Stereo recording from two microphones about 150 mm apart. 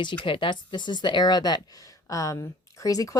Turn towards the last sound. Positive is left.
turn(degrees=20)  # may be behind; listen again after turning